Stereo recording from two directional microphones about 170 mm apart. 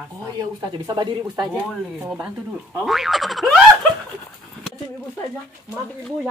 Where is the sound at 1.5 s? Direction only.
5° right (ahead or behind).